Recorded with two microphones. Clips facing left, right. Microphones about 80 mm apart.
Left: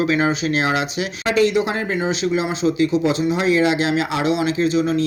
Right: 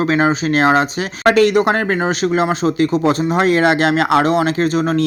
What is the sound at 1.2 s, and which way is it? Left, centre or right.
Speech, right.